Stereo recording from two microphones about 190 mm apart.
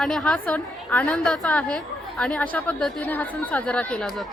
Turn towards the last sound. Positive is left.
turn(degrees=5)  # may be behind; listen again after turning